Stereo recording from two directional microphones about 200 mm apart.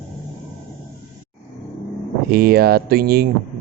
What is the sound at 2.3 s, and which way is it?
Speech, 50° right (ahead or behind).